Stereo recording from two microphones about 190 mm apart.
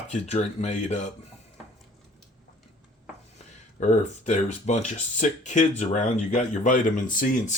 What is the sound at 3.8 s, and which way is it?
Speech, 40° left (ahead or behind).